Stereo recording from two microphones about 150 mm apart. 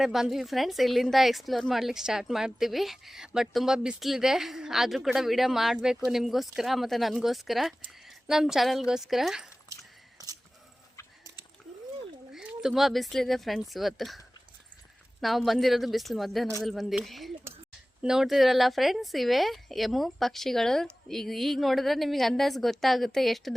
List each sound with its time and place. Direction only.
0.0 s a woman's voice: centre (ahead or behind)
9.7 s a sound: 20° right (ahead or behind)
12.3 s a woman's voice: 5° right (ahead or behind)
15.2 s a woman's voice: centre (ahead or behind)